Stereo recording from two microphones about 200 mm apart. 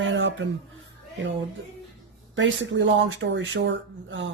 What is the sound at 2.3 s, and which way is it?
Speech, 70° right (ahead or behind).